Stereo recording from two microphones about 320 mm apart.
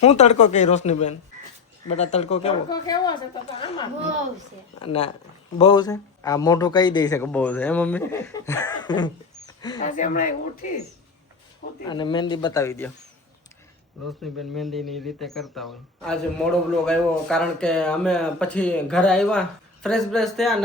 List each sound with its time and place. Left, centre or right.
0.0 s a woman's voice: left
11.9 s speech: centre
14.5 s speech: centre